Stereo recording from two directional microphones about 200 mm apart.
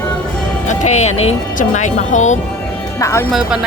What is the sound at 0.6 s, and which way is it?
Speech, 35° left (ahead or behind).